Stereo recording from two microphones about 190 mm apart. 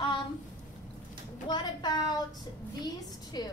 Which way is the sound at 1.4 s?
20° left (ahead or behind).